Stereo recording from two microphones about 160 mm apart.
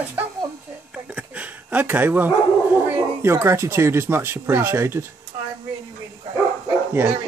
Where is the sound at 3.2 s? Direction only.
15° right (ahead or behind).